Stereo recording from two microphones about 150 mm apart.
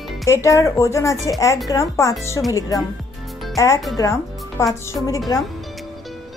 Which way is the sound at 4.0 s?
20° left (ahead or behind).